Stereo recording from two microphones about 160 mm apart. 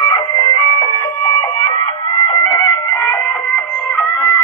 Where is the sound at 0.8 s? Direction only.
25° left (ahead or behind).